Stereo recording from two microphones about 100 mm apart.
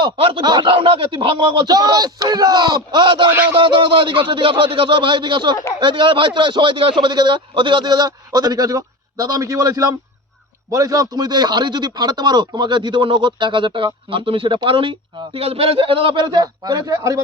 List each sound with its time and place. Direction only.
0.2 s speech: 65° right (ahead or behind)
0.4 s a man's voice: 50° right (ahead or behind)
3.2 s music: 20° right (ahead or behind)
3.5 s a man's voice: 55° right (ahead or behind)
16.4 s a man's voice: 40° right (ahead or behind)